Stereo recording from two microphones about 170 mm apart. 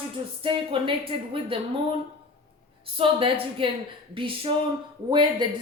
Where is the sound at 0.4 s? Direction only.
30° right (ahead or behind).